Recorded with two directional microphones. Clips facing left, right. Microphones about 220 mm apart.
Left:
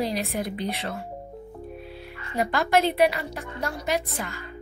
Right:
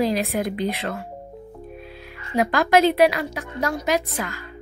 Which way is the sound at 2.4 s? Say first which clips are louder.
Right 5 dB; 90° right.